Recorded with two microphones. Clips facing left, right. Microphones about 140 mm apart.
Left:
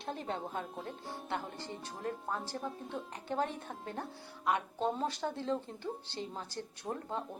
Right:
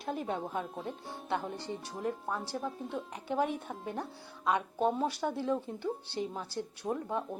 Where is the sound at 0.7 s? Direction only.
Centre (ahead or behind).